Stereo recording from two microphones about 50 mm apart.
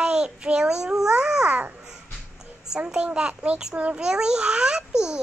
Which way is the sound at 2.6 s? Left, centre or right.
Centre.